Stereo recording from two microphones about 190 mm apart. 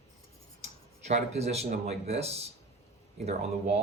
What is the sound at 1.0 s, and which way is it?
Speech, 35° right (ahead or behind).